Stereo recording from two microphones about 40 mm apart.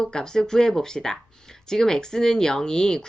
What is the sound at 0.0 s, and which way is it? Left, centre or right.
A woman's voice, centre.